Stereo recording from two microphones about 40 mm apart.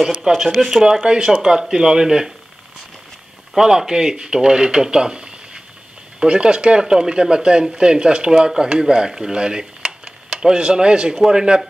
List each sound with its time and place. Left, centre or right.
0.5 s speech: centre
3.5 s speech: centre
11.1 s speech: centre